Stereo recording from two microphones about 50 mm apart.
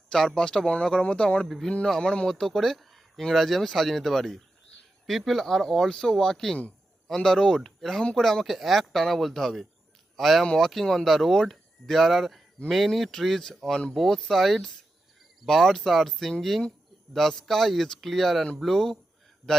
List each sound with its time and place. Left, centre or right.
0.1 s speech: centre
1.5 s speech: centre
10.4 s speech: centre